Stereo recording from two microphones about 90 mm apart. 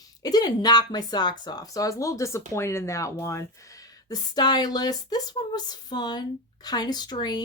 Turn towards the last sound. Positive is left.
turn(degrees=50)  # may be behind; listen again after turning